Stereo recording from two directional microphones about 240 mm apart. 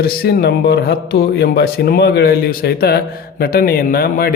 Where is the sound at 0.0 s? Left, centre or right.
Left.